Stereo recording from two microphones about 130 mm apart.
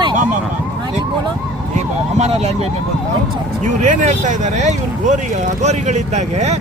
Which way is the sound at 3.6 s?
65° right (ahead or behind).